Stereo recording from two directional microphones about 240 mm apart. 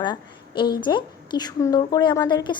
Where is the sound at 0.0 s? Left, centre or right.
Centre.